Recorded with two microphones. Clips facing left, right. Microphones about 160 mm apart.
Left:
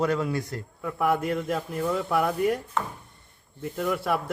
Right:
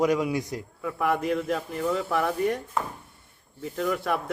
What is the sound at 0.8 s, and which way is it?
A man's voice, centre (ahead or behind).